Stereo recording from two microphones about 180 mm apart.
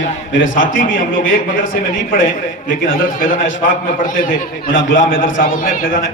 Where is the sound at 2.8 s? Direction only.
50° left (ahead or behind).